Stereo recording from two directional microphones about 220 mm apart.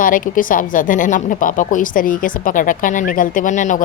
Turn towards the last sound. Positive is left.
turn(degrees=35)  # may be behind; listen again after turning